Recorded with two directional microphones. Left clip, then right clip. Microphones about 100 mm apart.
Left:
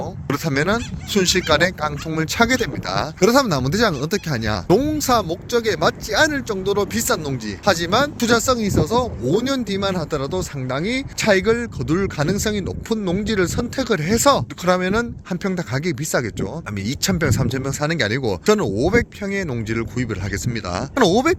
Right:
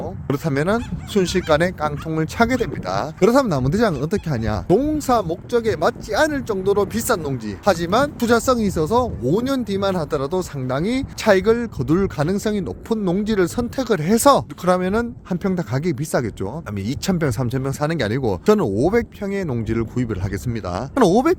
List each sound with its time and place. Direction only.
0.0 s speech: 35° right (ahead or behind)
13.1 s speech: 55° right (ahead or behind)
14.6 s speech: 40° right (ahead or behind)